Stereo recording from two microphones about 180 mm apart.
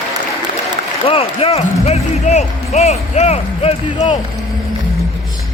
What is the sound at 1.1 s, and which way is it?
Speech, 30° left (ahead or behind).